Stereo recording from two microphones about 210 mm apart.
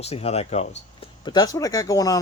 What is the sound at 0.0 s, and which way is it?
Speech, 30° left (ahead or behind).